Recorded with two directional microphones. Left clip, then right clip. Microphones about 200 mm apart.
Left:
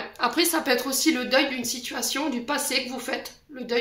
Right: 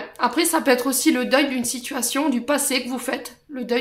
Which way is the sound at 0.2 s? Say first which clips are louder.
Right 3 dB; 40° right (ahead or behind).